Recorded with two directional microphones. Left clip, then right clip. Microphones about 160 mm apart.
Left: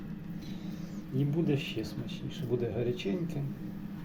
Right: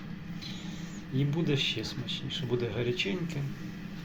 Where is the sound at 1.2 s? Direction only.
Centre (ahead or behind).